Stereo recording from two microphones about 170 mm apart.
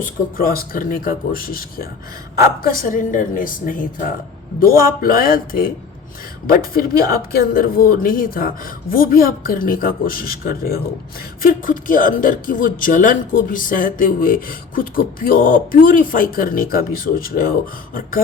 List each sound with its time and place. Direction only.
0.0 s speech: 60° left (ahead or behind)